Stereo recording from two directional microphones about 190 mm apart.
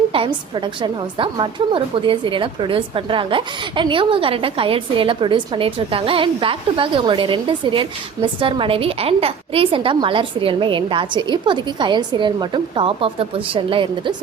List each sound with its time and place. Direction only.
0.1 s a woman's voice: 25° right (ahead or behind)